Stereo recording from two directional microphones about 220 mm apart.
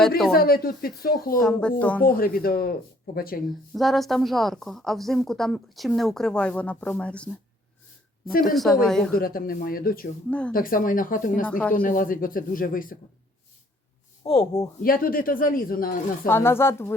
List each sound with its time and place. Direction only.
0.3 s speech: 45° left (ahead or behind)
1.4 s a woman's voice: 5° left (ahead or behind)
2.0 s speech: 40° left (ahead or behind)
3.8 s a woman's voice: centre (ahead or behind)
8.3 s speech: 40° left (ahead or behind)
8.5 s a woman's voice: centre (ahead or behind)
9.1 s speech: 40° left (ahead or behind)
10.2 s a woman's voice: 5° left (ahead or behind)
10.5 s speech: 40° left (ahead or behind)
11.4 s speech: 5° left (ahead or behind)
11.7 s speech: 40° left (ahead or behind)
14.3 s speech: 15° left (ahead or behind)
14.8 s speech: 40° left (ahead or behind)
16.2 s speech: 10° left (ahead or behind)